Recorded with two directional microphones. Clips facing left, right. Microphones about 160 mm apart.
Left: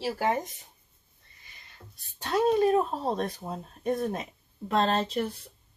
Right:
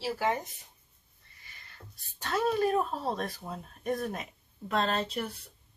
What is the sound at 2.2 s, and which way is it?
Speech, 20° left (ahead or behind).